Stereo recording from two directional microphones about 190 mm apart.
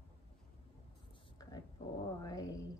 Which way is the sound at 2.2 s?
20° left (ahead or behind).